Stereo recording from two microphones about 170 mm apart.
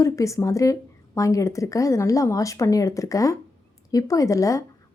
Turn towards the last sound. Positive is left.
turn(degrees=20)  # may be behind; listen again after turning